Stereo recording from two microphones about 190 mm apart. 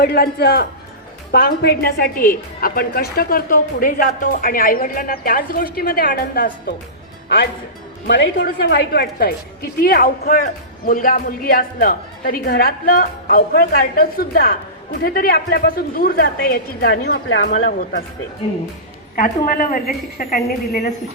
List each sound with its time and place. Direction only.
0.0 s a woman's voice: 55° left (ahead or behind)
8.0 s a woman's voice: 65° left (ahead or behind)
17.7 s a woman's voice: 50° left (ahead or behind)
19.1 s a woman's voice: 45° left (ahead or behind)